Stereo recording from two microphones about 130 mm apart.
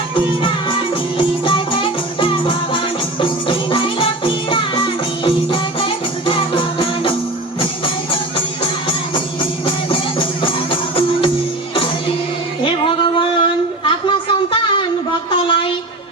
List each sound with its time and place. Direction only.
1.5 s music: 40° left (ahead or behind)
9.1 s music: 40° left (ahead or behind)
13.1 s a sound: 40° left (ahead or behind)